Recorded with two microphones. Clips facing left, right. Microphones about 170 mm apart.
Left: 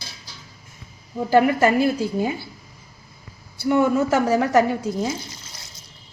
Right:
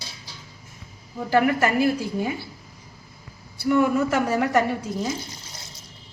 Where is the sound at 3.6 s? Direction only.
25° left (ahead or behind).